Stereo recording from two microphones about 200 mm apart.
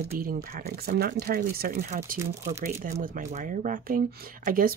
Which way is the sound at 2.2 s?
15° right (ahead or behind).